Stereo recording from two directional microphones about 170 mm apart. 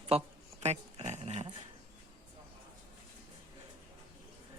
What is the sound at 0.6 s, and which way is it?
Dog, 40° right (ahead or behind).